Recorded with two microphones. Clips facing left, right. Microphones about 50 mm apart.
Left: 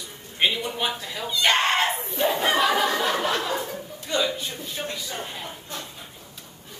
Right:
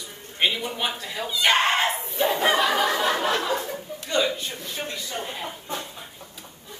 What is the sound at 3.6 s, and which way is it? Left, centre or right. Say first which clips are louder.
Chuckle: even; centre.